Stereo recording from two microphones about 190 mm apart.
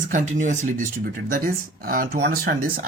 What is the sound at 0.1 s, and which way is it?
Speech, 40° right (ahead or behind).